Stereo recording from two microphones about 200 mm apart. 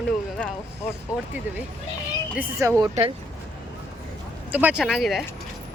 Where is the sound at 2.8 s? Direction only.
25° right (ahead or behind).